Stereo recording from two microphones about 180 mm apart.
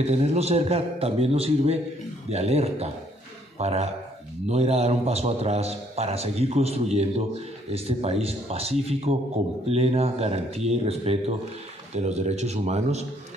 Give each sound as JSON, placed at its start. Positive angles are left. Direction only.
{"t": 0.0, "sound": "a man's voice", "side_deg": -35}